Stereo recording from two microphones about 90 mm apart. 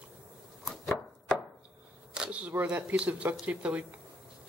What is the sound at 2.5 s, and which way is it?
Speech, 15° right (ahead or behind).